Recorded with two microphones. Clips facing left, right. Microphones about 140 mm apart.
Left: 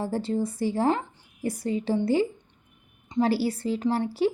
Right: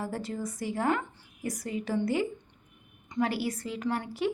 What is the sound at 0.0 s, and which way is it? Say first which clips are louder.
A woman's voice: left 7 dB; 30° left (ahead or behind).